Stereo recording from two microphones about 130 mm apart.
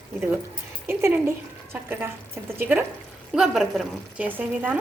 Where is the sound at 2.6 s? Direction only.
15° right (ahead or behind).